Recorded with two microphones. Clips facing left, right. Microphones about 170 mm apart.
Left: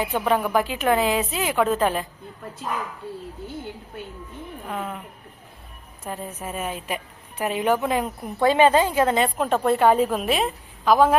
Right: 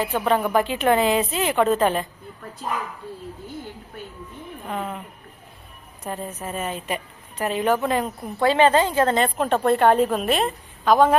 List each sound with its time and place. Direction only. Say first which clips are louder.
0.0 s a woman's voice: right 1 dB; 10° left (ahead or behind)
4.7 s a woman's voice: right 2 dB; centre (ahead or behind)
6.1 s a woman's voice: right 2 dB; 10° left (ahead or behind)